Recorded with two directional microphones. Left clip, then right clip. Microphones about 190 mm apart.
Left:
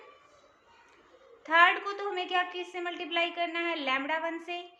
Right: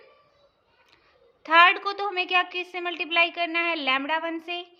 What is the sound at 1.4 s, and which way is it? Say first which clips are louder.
A woman's voice: right 5 dB; 40° right (ahead or behind).